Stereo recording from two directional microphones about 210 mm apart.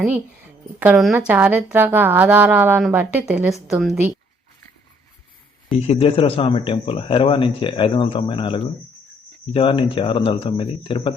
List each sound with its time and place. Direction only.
0.8 s a woman's voice: 5° right (ahead or behind)
5.7 s speech: 25° left (ahead or behind)